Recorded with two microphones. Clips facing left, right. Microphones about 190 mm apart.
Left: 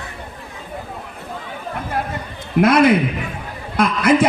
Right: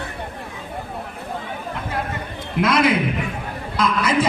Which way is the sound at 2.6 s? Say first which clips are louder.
Left 5 dB; 55° left (ahead or behind).